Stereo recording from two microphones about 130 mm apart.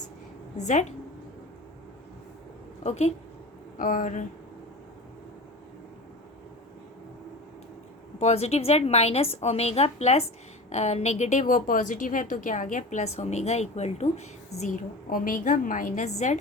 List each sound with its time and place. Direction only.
0.5 s a woman's voice: 65° left (ahead or behind)
2.8 s a woman's voice: 55° left (ahead or behind)
3.8 s speech: 90° left
8.2 s a woman's voice: 55° left (ahead or behind)